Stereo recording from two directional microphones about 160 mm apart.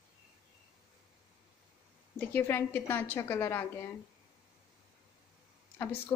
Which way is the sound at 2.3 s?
15° left (ahead or behind).